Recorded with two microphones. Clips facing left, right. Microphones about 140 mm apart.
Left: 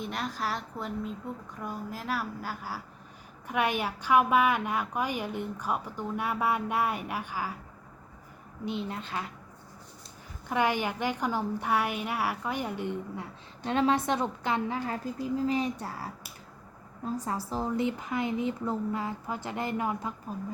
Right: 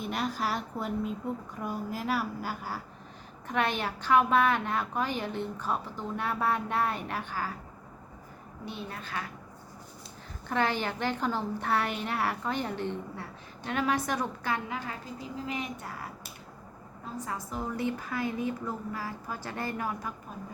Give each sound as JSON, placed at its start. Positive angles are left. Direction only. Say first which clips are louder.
{"t": 0.0, "sound": "a woman's voice", "louder": "right 2 dB", "side_deg": 0}
{"t": 8.6, "sound": "a woman's voice", "louder": "left 6 dB", "side_deg": 20}
{"t": 10.5, "sound": "a woman's voice", "louder": "left 1 dB", "side_deg": 15}
{"t": 13.7, "sound": "a woman's voice", "louder": "left 4 dB", "side_deg": 25}
{"t": 15.4, "sound": "speech", "louder": "left 7 dB", "side_deg": 35}
{"t": 17.2, "sound": "a woman's voice", "louder": "left 2 dB", "side_deg": 30}